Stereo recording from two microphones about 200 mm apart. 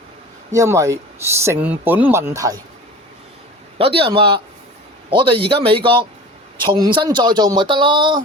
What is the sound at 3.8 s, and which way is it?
Speech, 30° right (ahead or behind).